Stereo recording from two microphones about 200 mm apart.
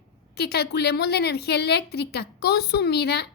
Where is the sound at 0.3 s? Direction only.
55° left (ahead or behind).